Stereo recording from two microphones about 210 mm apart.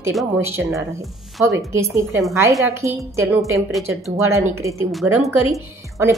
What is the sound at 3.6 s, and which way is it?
Speech, centre (ahead or behind).